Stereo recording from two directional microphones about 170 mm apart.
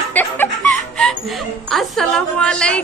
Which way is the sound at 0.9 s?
Centre (ahead or behind).